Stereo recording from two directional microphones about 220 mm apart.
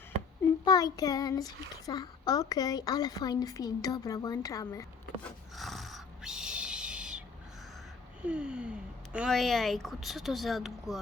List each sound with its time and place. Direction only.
0.6 s a child's voice: 15° left (ahead or behind)
5.5 s a sound: centre (ahead or behind)
8.2 s a woman's voice: 5° right (ahead or behind)